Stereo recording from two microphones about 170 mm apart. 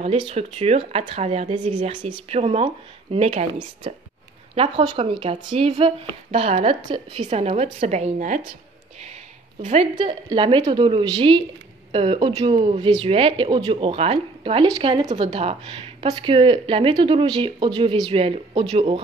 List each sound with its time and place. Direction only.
0.0 s speech: 35° right (ahead or behind)
1.7 s speech: 30° right (ahead or behind)
4.6 s speech: 30° right (ahead or behind)
9.6 s a woman's voice: 45° right (ahead or behind)
9.9 s a woman's voice: 30° right (ahead or behind)